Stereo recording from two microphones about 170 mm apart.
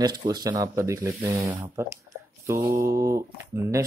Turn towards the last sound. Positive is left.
turn(degrees=-15)  # may be behind; listen again after turning